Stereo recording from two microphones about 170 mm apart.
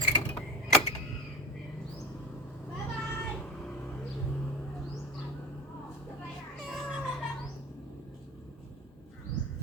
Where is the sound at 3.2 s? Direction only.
5° left (ahead or behind).